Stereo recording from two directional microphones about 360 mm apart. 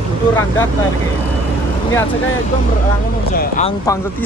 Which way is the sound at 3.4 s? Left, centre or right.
Centre.